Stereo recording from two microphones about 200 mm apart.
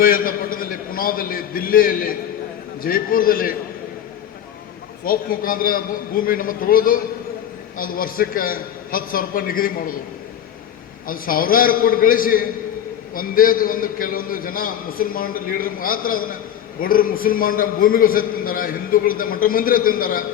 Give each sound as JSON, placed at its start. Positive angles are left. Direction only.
{"t": 0.0, "sound": "a man's voice", "side_deg": 45}
{"t": 5.0, "sound": "a man's voice", "side_deg": 45}
{"t": 11.0, "sound": "a man's voice", "side_deg": 45}